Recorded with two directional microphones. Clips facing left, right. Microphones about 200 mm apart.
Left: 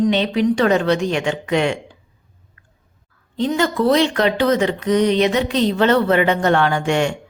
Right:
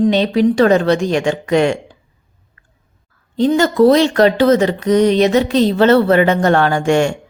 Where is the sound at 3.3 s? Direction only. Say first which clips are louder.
Right 6 dB; 40° right (ahead or behind).